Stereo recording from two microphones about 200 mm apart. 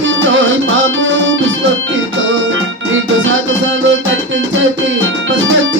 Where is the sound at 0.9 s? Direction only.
70° right (ahead or behind).